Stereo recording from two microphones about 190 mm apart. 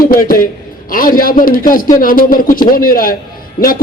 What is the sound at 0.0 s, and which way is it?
A man's voice, 50° left (ahead or behind).